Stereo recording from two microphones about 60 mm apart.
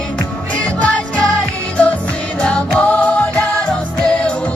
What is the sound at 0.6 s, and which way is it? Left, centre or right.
Music, left.